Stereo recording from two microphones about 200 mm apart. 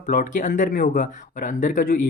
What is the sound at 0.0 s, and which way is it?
Speech, 40° left (ahead or behind).